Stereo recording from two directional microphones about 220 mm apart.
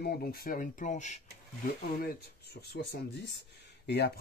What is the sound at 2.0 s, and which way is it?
Speech, 45° left (ahead or behind).